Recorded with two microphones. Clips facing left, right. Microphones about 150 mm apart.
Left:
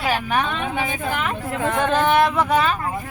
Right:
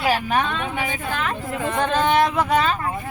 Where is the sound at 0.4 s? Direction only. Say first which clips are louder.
Left 1 dB; 15° left (ahead or behind).